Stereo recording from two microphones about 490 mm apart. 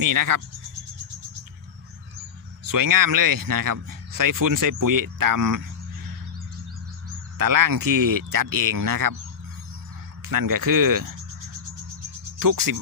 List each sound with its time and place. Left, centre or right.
0.0 s speech: right
2.6 s speech: right
7.3 s speech: right
10.2 s speech: right
12.4 s speech: right